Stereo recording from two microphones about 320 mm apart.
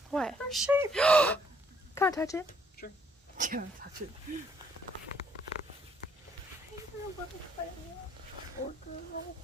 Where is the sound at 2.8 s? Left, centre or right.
Left.